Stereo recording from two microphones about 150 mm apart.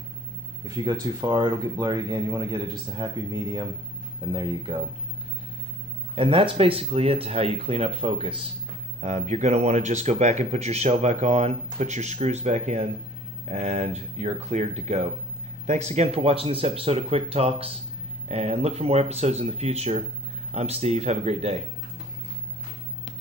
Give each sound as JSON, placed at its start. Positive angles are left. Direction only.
{"t": 0.7, "sound": "speech", "side_deg": -25}
{"t": 6.1, "sound": "speech", "side_deg": -35}
{"t": 9.0, "sound": "speech", "side_deg": -50}